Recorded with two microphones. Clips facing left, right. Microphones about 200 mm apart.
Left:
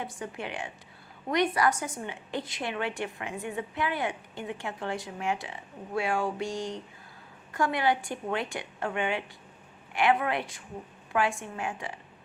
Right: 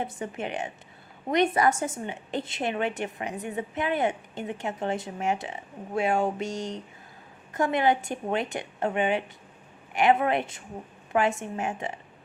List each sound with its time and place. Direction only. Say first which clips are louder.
0.0 s a woman's voice: right 4 dB; 25° right (ahead or behind)